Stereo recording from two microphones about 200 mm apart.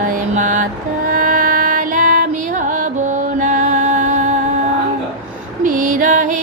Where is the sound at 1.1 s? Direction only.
40° right (ahead or behind).